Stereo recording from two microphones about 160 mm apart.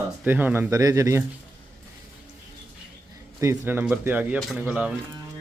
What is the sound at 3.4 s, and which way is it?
Speech, 15° right (ahead or behind).